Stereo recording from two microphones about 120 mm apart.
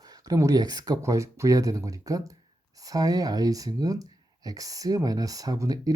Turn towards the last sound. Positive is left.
turn(degrees=-30)  # may be behind; listen again after turning